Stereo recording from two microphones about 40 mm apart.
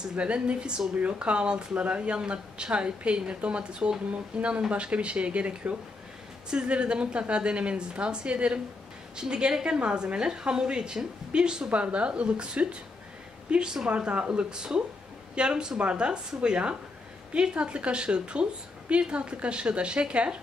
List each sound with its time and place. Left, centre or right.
0.1 s a woman's voice: right
11.7 s a woman's voice: right